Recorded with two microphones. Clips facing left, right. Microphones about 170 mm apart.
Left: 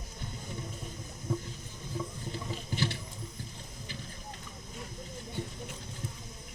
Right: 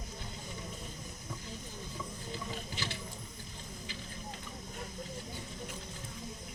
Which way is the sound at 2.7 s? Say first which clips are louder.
Left 7 dB; 55° left (ahead or behind).